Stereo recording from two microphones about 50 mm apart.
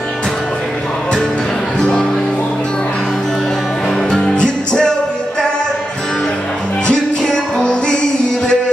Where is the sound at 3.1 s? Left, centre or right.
Centre.